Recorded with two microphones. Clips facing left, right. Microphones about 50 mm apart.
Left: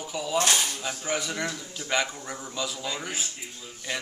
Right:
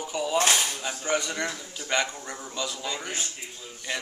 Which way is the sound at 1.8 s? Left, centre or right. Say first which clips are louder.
Even; centre.